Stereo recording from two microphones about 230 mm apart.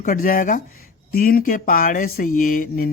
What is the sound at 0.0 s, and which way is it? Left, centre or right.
Speech, left.